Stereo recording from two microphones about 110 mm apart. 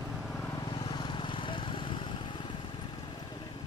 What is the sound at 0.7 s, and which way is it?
Vehicle, 45° left (ahead or behind).